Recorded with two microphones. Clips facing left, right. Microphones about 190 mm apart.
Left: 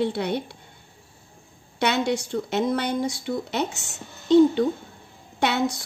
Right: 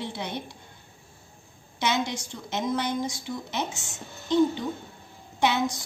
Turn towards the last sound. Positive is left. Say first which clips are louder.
# left 2 dB
turn(degrees=65)  # may be behind; listen again after turning